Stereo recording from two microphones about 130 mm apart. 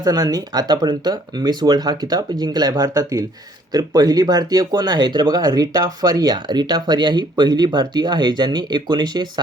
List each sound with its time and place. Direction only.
0.0 s speech: 30° right (ahead or behind)